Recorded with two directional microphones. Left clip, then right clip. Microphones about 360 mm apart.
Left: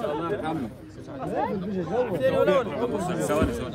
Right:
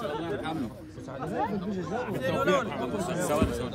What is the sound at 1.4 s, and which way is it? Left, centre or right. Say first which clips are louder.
Speech: left 3 dB; left.